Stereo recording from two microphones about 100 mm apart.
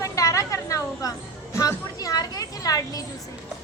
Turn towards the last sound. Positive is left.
turn(degrees=40)  # may be behind; listen again after turning